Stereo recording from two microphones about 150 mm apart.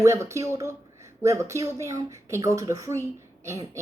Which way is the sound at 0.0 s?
20° right (ahead or behind).